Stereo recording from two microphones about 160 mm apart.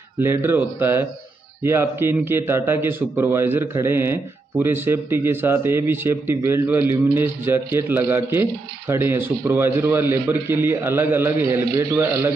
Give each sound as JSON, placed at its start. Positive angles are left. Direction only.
{"t": 0.2, "sound": "speech", "side_deg": -15}